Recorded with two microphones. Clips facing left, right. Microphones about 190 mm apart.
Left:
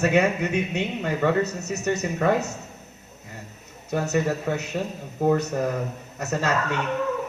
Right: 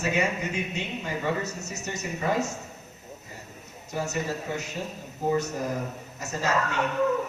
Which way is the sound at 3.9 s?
65° left (ahead or behind).